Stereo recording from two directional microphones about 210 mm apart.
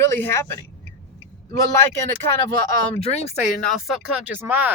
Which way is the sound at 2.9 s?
30° left (ahead or behind).